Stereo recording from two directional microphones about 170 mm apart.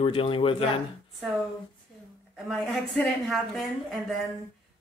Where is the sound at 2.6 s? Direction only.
Centre (ahead or behind).